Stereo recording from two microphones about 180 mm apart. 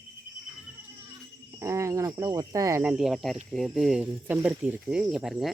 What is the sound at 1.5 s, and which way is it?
Speech, 15° right (ahead or behind).